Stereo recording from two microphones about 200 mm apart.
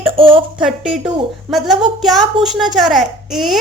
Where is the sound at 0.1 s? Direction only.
25° right (ahead or behind).